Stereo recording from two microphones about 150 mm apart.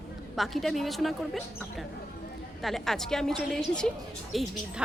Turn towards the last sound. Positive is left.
turn(degrees=0)  # may be behind; listen again after turning